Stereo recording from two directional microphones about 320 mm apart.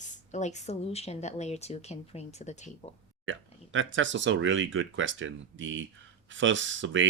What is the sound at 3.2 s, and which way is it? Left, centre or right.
Speech, right.